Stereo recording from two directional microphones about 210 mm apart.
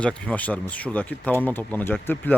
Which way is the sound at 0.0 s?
5° left (ahead or behind).